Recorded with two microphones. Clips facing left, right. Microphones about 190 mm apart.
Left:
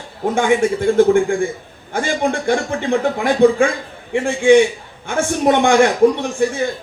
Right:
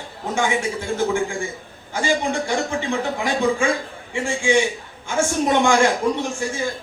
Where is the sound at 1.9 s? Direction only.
55° left (ahead or behind).